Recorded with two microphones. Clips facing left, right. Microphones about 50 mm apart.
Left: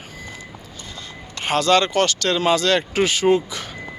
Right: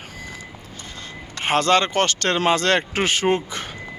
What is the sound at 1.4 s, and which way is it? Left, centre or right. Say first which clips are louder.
Speech: left 1 dB; right.